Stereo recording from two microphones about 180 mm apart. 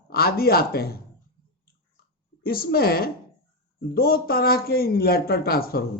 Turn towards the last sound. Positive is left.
turn(degrees=55)  # may be behind; listen again after turning